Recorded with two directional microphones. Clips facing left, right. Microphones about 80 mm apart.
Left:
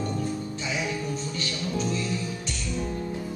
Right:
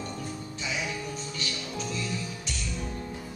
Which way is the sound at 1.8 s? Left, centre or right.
Left.